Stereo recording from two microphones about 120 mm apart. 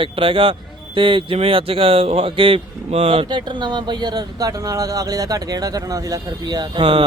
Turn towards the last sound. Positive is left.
turn(degrees=-40)  # may be behind; listen again after turning